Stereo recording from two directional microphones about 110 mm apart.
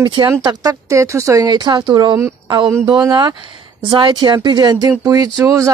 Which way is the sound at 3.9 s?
45° right (ahead or behind).